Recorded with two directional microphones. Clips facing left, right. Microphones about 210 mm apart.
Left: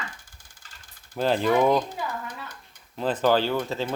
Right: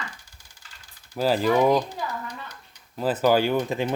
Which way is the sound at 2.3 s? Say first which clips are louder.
Even; 50° left (ahead or behind).